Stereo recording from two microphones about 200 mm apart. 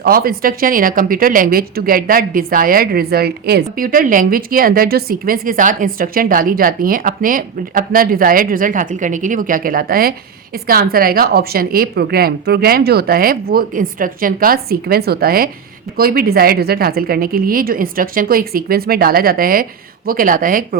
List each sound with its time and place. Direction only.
0.0 s speech: 50° right (ahead or behind)